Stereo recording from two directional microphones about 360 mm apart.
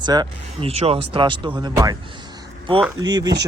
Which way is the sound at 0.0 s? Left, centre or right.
Centre.